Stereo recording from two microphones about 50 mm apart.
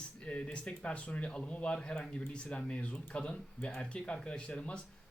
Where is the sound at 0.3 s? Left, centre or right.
Left.